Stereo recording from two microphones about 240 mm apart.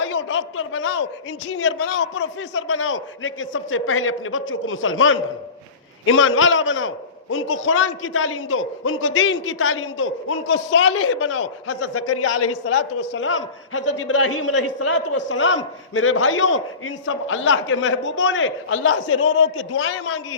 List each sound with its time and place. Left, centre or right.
0.0 s a man's voice: left
13.0 s a man's voice: left